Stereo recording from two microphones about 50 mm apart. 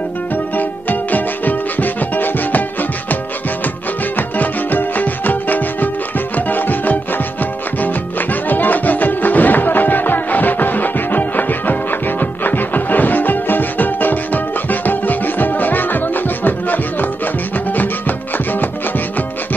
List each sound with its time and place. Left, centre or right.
0.6 s music: left
4.2 s music: left